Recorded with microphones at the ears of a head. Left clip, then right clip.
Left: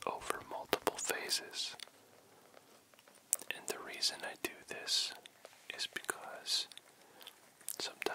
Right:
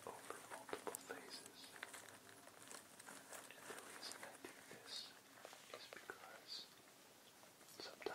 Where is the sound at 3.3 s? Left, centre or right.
Left.